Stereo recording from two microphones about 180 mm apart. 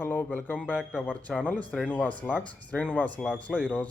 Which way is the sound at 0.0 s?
10° left (ahead or behind).